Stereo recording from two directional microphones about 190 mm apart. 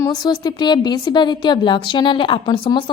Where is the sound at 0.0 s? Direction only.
20° left (ahead or behind).